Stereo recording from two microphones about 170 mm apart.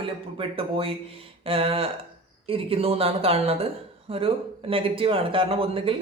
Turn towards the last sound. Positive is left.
turn(degrees=-30)  # may be behind; listen again after turning